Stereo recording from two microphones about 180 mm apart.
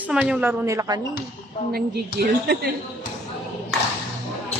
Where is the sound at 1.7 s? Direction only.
60° right (ahead or behind).